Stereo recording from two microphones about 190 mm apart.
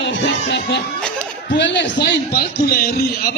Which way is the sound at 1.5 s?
70° left (ahead or behind).